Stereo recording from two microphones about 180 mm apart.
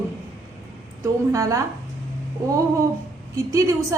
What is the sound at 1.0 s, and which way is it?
Speech, 15° right (ahead or behind).